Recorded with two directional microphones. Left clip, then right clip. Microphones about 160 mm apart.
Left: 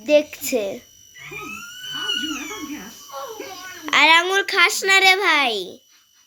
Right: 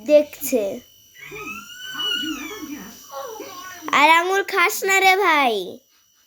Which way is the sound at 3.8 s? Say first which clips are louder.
Even; 20° right (ahead or behind).